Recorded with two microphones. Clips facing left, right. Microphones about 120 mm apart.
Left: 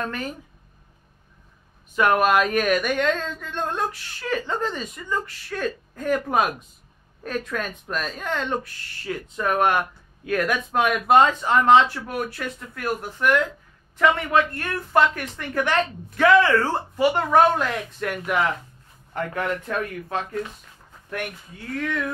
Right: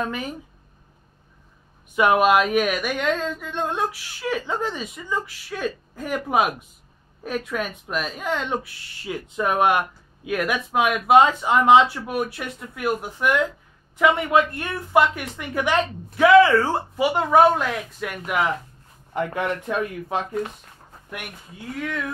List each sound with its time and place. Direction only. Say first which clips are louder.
0.0 s speech: right 2 dB; 10° right (ahead or behind)
2.0 s speech: right 2 dB; 10° right (ahead or behind)
19.1 s speech: right 2 dB; 15° right (ahead or behind)